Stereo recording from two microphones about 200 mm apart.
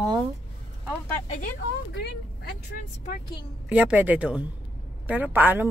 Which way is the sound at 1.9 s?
55° left (ahead or behind).